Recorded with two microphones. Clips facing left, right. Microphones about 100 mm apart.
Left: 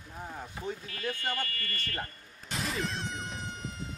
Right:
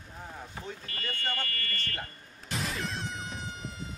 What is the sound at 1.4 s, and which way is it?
Speech, 50° right (ahead or behind).